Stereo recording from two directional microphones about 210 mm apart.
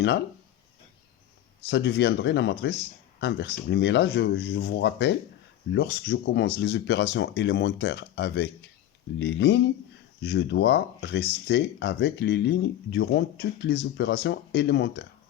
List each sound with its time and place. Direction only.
1.6 s speech: 55° left (ahead or behind)